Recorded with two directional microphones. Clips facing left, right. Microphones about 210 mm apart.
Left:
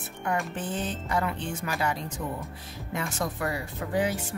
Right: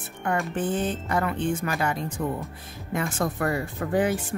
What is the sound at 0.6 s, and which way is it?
Speech, 55° right (ahead or behind).